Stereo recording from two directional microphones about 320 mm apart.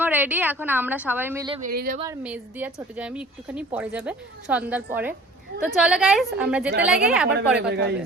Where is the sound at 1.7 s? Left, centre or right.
Right.